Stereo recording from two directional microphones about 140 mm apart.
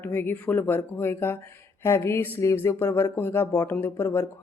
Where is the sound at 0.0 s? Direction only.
15° left (ahead or behind).